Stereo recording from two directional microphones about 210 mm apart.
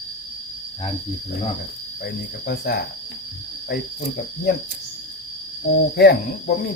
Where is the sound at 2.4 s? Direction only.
45° left (ahead or behind).